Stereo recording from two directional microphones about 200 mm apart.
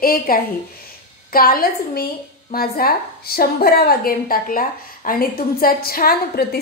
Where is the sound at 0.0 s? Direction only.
50° left (ahead or behind).